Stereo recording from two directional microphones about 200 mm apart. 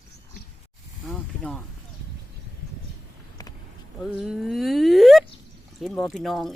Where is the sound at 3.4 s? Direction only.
20° left (ahead or behind).